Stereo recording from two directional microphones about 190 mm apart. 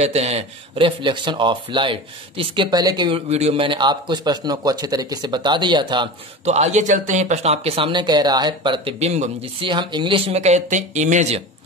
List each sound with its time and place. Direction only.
0.0 s a man's voice: 35° right (ahead or behind)